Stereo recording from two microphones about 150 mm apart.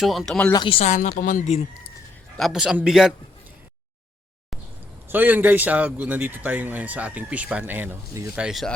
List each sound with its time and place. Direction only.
0.0 s a man's voice: centre (ahead or behind)
0.5 s a woman's voice: 35° left (ahead or behind); by 1.6 s 50° left (ahead or behind)
2.4 s a man's voice: 5° right (ahead or behind)
5.0 s speech: 10° right (ahead or behind)
8.4 s a man's voice: centre (ahead or behind)